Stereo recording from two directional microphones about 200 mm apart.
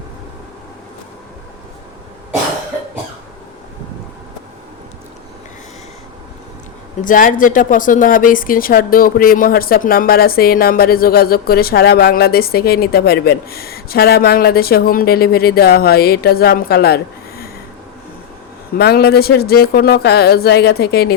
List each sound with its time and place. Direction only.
7.0 s speech: 40° left (ahead or behind)
18.8 s speech: 50° left (ahead or behind)